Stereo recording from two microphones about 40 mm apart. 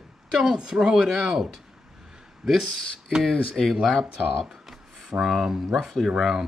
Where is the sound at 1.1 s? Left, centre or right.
Centre.